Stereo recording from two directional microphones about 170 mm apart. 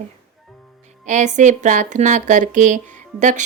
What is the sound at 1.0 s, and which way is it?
Speech, 45° right (ahead or behind).